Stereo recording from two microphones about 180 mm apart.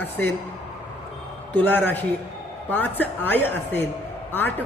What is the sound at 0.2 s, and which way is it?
Speech, 10° left (ahead or behind).